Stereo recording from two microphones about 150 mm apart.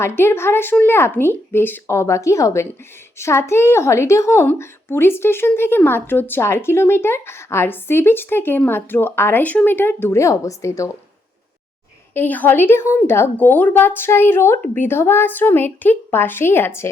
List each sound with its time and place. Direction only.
0.0 s a woman's voice: 15° left (ahead or behind)
12.1 s a woman's voice: 10° left (ahead or behind)